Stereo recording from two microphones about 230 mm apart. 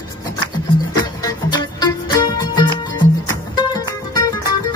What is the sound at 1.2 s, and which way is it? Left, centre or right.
Music, centre.